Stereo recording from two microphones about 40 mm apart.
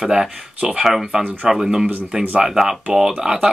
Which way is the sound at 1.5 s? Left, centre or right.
Centre.